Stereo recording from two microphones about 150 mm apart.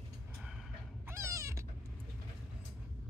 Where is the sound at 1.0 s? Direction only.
20° right (ahead or behind).